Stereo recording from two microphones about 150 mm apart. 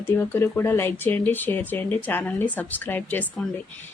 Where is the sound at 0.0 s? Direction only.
15° left (ahead or behind).